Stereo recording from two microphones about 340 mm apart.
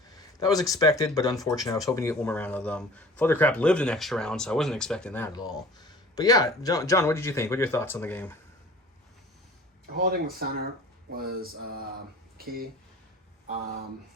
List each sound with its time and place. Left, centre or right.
0.3 s speech: centre
10.0 s a sound: right
12.4 s speech: right